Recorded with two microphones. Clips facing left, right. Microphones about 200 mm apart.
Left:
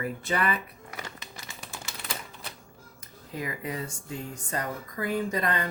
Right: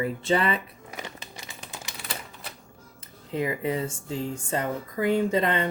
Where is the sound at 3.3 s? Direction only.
25° right (ahead or behind).